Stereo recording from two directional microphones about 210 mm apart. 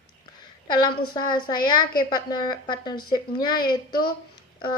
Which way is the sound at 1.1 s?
20° left (ahead or behind).